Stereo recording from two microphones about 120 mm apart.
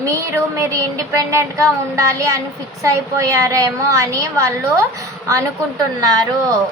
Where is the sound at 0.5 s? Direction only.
25° right (ahead or behind).